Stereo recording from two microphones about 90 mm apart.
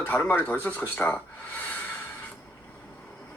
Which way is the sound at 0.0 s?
15° left (ahead or behind).